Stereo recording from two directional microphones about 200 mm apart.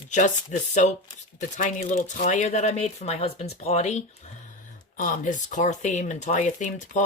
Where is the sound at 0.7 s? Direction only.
35° left (ahead or behind).